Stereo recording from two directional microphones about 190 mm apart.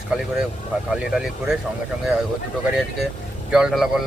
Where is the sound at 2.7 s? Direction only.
5° right (ahead or behind).